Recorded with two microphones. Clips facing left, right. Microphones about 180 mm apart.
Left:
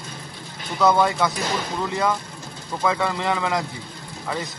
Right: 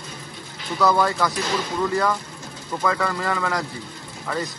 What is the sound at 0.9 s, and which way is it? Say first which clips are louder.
Speech: left 2 dB; 20° left (ahead or behind).